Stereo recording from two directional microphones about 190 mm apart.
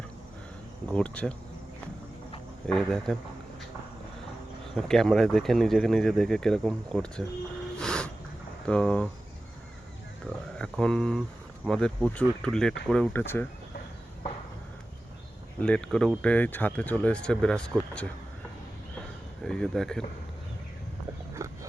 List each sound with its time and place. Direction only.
0.9 s speech: 5° left (ahead or behind)
2.6 s speech: centre (ahead or behind)
4.7 s speech: centre (ahead or behind)
7.8 s snort: 5° left (ahead or behind)
8.6 s speech: 5° left (ahead or behind)
10.2 s speech: 5° left (ahead or behind)
15.6 s speech: 5° left (ahead or behind)
19.4 s speech: 5° left (ahead or behind)
21.3 s a sound: 15° right (ahead or behind)